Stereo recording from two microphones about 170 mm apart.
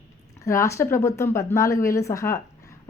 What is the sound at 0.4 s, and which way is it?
A woman's voice, 15° left (ahead or behind).